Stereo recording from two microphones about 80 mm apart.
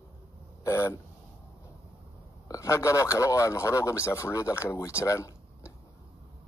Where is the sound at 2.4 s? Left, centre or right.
Left.